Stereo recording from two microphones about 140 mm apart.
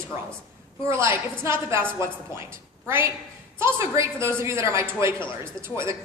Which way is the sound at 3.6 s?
20° right (ahead or behind).